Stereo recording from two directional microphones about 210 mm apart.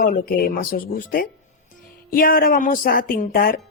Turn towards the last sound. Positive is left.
turn(degrees=45)  # may be behind; listen again after turning